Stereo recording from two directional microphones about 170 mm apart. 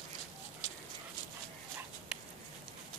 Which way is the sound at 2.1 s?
5° right (ahead or behind).